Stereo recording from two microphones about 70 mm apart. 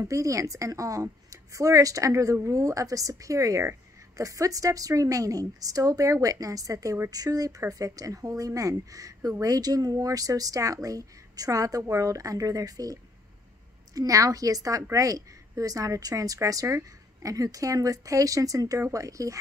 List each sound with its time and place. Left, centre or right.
0.0 s a woman's voice: right